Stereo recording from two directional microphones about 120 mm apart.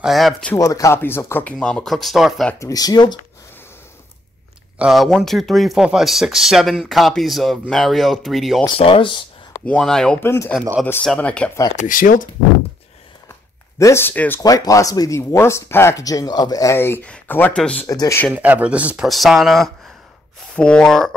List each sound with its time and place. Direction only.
0.0 s speech: centre (ahead or behind)
0.6 s speech: 25° left (ahead or behind); by 2.5 s centre (ahead or behind)
2.6 s speech: 30° left (ahead or behind)
4.7 s speech: 5° right (ahead or behind)
8.6 s speech: 50° left (ahead or behind)
9.7 s speech: 5° left (ahead or behind)
10.2 s speech: 20° left (ahead or behind)
11.7 s speech: 90° left
13.7 s speech: 25° left (ahead or behind)
14.4 s speech: 30° left (ahead or behind); by 17.8 s 10° left (ahead or behind)
17.8 s speech: 25° left (ahead or behind)
18.3 s speech: 10° right (ahead or behind); by 21.1 s 5° left (ahead or behind)